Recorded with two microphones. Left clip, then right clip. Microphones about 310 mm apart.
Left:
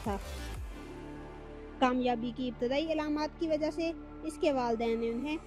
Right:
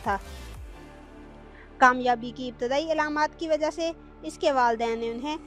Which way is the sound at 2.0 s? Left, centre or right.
Right.